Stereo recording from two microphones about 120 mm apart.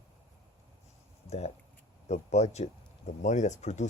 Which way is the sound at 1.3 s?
65° left (ahead or behind).